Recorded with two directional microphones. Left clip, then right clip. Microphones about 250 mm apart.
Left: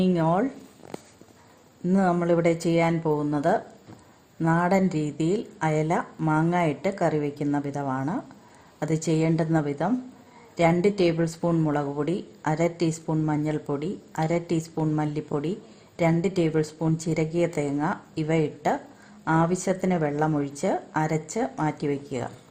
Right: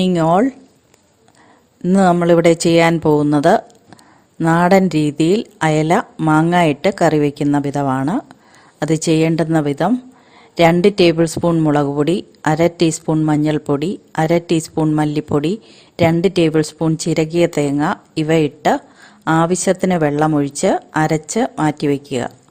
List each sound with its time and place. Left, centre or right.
0.0 s a woman's voice: right
1.8 s a woman's voice: right